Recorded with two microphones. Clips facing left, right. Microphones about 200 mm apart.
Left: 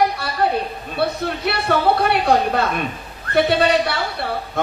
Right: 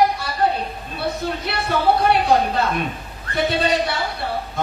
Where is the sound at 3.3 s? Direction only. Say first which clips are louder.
Left 4 dB; 65° left (ahead or behind).